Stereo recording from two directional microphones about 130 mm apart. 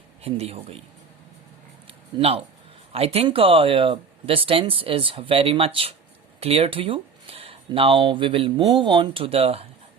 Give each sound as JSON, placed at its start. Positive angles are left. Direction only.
{"t": 0.2, "sound": "speech", "side_deg": -50}
{"t": 1.9, "sound": "a sound", "side_deg": -45}
{"t": 2.9, "sound": "speech", "side_deg": -50}